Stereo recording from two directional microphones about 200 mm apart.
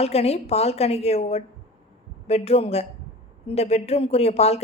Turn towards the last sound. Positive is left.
turn(degrees=30)  # may be behind; listen again after turning